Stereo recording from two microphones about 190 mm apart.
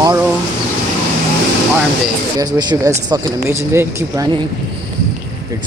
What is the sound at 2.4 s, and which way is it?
Speech, 20° right (ahead or behind).